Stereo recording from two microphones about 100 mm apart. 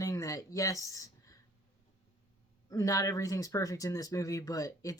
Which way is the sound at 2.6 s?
35° left (ahead or behind).